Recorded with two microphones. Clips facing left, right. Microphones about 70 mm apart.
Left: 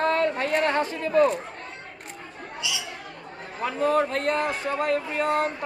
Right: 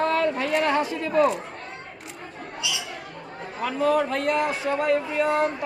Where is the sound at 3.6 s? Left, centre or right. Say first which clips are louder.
Right 1 dB; left.